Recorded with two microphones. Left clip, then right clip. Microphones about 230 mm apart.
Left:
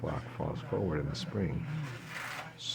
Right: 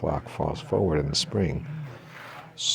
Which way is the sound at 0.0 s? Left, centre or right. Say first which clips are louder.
Right 10 dB; right.